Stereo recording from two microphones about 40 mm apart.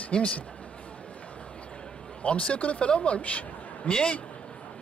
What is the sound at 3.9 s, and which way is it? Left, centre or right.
Speech, left.